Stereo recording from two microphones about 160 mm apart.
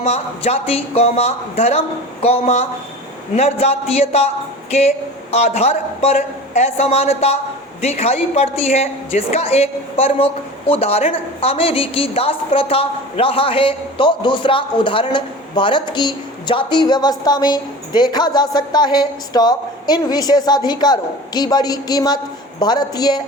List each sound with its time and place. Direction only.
0.0 s a woman's voice: 40° left (ahead or behind); by 23.2 s 25° left (ahead or behind)